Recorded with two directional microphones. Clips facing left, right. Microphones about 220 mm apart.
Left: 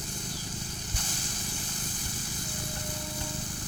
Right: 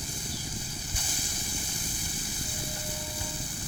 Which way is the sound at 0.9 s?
10° right (ahead or behind).